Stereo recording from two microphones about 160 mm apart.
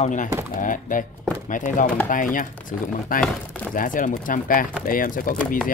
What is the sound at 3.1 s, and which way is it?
Speech, 60° left (ahead or behind).